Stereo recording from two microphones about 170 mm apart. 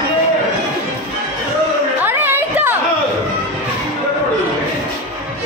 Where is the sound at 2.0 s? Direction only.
10° right (ahead or behind).